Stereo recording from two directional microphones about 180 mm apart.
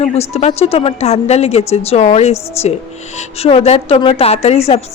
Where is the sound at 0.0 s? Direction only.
35° left (ahead or behind).